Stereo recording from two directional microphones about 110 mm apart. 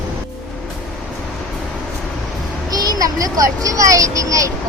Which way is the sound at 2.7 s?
35° right (ahead or behind).